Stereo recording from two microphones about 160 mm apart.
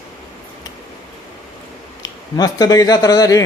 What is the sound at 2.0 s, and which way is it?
Speech, 25° left (ahead or behind).